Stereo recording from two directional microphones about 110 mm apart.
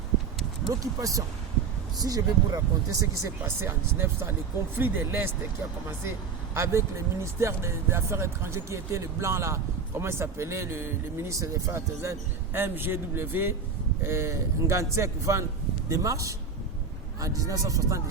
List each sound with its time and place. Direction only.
0.7 s a man's voice: 30° right (ahead or behind)